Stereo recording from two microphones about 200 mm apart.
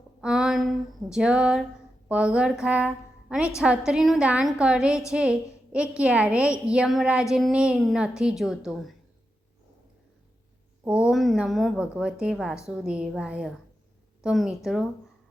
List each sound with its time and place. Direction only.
0.2 s a sound: 5° right (ahead or behind)
2.0 s a woman's voice: 5° right (ahead or behind)
10.8 s a woman's voice: 5° right (ahead or behind)